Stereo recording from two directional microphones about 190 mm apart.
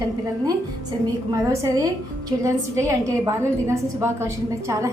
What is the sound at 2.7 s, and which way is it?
A woman's voice, 15° right (ahead or behind).